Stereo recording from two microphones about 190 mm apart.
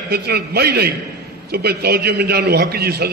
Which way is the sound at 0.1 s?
55° right (ahead or behind).